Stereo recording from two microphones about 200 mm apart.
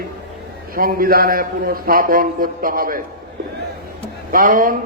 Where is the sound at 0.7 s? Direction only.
45° right (ahead or behind).